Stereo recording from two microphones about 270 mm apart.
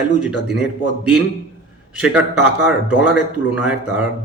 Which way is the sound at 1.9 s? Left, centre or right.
Centre.